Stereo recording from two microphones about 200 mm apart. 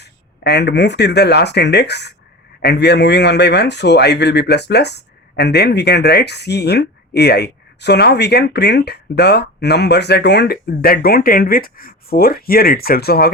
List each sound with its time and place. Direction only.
0.0 s a man's voice: 60° left (ahead or behind)